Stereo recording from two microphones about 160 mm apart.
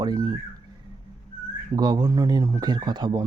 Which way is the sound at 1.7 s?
25° right (ahead or behind).